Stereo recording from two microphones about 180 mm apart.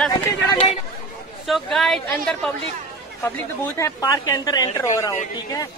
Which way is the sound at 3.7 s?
20° left (ahead or behind).